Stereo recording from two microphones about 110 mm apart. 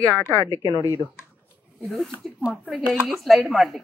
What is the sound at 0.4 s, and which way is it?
Speech, 30° right (ahead or behind).